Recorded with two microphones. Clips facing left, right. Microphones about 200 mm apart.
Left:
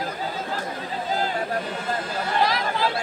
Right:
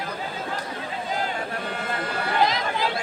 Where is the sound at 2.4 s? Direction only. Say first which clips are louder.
Left 1 dB; 20° right (ahead or behind).